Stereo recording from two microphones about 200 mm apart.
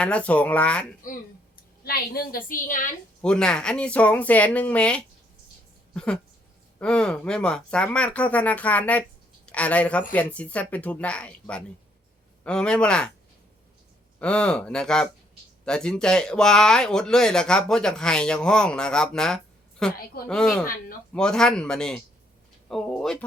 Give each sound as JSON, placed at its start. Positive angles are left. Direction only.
{"t": 0.0, "sound": "speech", "side_deg": 5}
{"t": 1.8, "sound": "a woman's voice", "side_deg": 50}
{"t": 3.2, "sound": "speech", "side_deg": 5}
{"t": 14.2, "sound": "speech", "side_deg": 5}